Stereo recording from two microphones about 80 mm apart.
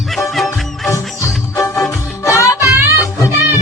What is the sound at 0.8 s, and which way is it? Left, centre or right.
Music, left.